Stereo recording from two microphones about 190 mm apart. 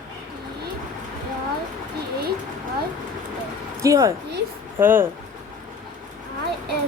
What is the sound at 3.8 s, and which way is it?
A woman's voice, 15° right (ahead or behind).